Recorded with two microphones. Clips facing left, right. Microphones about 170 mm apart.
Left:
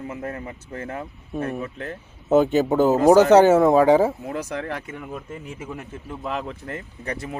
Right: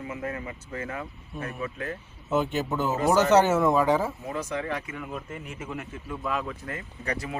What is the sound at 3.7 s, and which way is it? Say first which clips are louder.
Speech: left 7 dB; 90° left.